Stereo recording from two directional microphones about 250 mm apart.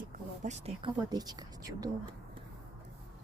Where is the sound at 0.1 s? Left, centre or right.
Right.